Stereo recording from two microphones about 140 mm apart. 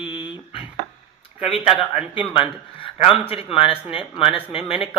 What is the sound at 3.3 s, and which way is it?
Speech, 40° left (ahead or behind).